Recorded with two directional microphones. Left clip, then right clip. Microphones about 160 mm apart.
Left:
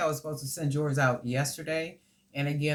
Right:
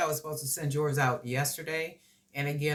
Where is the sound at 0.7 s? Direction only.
15° right (ahead or behind).